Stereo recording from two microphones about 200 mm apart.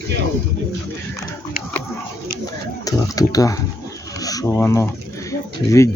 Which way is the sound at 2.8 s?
15° left (ahead or behind).